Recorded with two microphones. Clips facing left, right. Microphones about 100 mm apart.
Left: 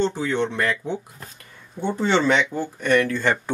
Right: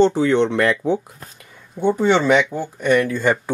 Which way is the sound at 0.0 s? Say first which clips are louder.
Right 7 dB; 70° right (ahead or behind).